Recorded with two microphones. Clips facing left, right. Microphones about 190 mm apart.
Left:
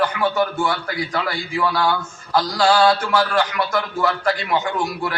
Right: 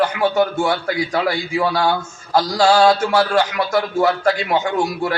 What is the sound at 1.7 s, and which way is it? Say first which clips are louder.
A man's voice: right 2 dB; 45° right (ahead or behind).